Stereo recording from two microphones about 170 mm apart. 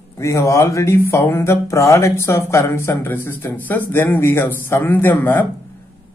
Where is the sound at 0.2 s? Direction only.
20° left (ahead or behind).